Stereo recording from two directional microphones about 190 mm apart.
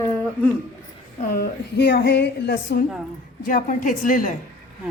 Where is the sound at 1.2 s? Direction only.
55° left (ahead or behind).